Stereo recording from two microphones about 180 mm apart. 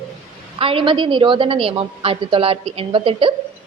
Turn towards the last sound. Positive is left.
turn(degrees=-30)  # may be behind; listen again after turning